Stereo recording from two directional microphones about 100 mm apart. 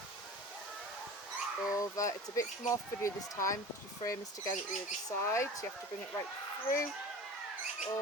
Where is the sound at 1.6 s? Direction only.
35° left (ahead or behind).